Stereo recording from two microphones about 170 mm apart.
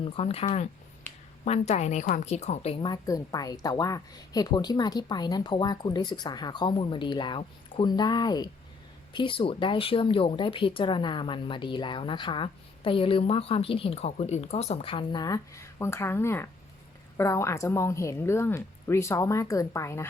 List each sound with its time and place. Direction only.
0.0 s speech: 35° left (ahead or behind)
1.1 s a sound: 10° left (ahead or behind)
1.5 s a woman's voice: 40° left (ahead or behind); by 20.1 s 15° left (ahead or behind)